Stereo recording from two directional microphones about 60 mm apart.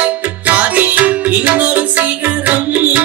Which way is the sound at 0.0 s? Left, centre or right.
Right.